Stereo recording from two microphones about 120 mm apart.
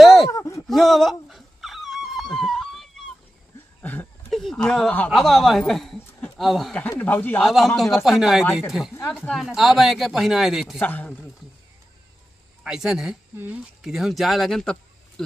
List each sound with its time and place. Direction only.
0.0 s a sound: centre (ahead or behind)
0.3 s a sound: 30° left (ahead or behind)
0.7 s wail: centre (ahead or behind)
3.8 s a sound: 15° left (ahead or behind)
4.3 s speech: centre (ahead or behind)
6.9 s speech: 15° left (ahead or behind)
7.4 s speech: centre (ahead or behind)
10.8 s speech: 15° left (ahead or behind)
12.6 s speech: 5° right (ahead or behind)